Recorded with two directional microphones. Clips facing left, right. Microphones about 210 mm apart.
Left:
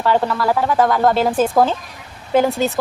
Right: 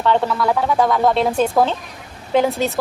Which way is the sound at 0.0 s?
5° left (ahead or behind).